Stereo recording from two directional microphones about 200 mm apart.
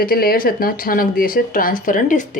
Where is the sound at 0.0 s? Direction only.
50° left (ahead or behind).